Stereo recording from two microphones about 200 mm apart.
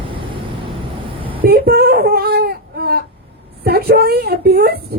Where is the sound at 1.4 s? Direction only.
50° right (ahead or behind).